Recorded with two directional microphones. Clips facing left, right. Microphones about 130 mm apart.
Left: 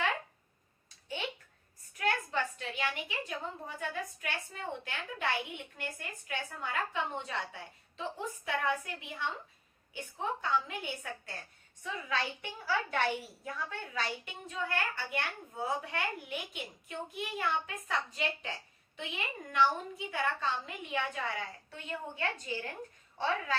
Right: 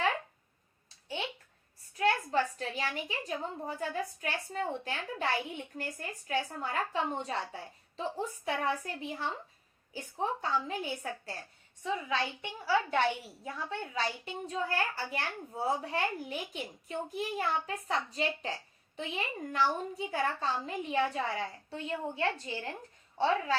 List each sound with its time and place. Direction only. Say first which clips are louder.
2.0 s a woman's voice: right 4 dB; 35° right (ahead or behind)
11.8 s a woman's voice: right 3 dB; 20° right (ahead or behind)